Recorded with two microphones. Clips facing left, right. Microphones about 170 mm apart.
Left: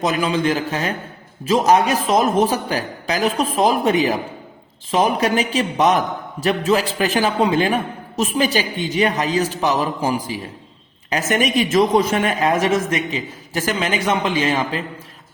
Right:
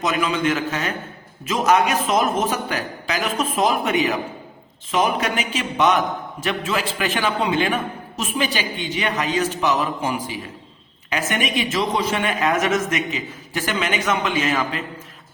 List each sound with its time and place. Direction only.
0.0 s speech: 35° left (ahead or behind)